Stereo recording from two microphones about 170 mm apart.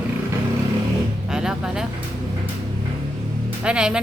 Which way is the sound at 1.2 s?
5° right (ahead or behind).